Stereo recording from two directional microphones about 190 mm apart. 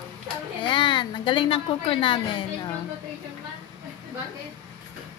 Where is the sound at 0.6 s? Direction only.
25° left (ahead or behind).